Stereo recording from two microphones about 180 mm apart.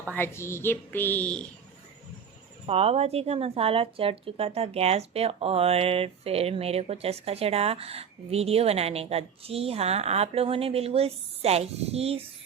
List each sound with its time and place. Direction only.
0.1 s a woman's voice: 15° left (ahead or behind)
2.6 s speech: 35° right (ahead or behind)